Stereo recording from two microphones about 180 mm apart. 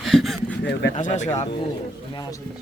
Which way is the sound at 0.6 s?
75° left (ahead or behind).